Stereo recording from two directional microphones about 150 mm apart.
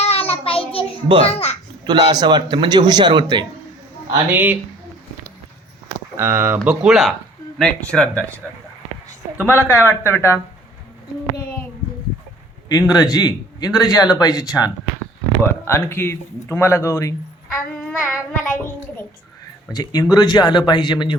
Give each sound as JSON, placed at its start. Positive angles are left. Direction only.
{"t": 0.0, "sound": "child singing", "side_deg": 40}
{"t": 1.2, "sound": "a child's voice", "side_deg": 40}
{"t": 1.8, "sound": "a man's voice", "side_deg": -30}
{"t": 4.3, "sound": "speech", "side_deg": -10}
{"t": 6.1, "sound": "speech", "side_deg": -15}
{"t": 6.7, "sound": "speech", "side_deg": -5}
{"t": 9.5, "sound": "speech", "side_deg": 15}
{"t": 11.3, "sound": "child singing", "side_deg": 15}
{"t": 12.6, "sound": "speech", "side_deg": 25}
{"t": 17.7, "sound": "child singing", "side_deg": 5}
{"t": 19.7, "sound": "speech", "side_deg": 25}